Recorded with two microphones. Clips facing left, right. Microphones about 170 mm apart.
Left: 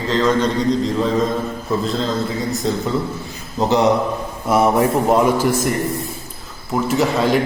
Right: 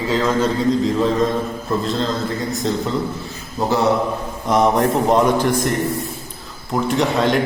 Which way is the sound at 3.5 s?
20° left (ahead or behind).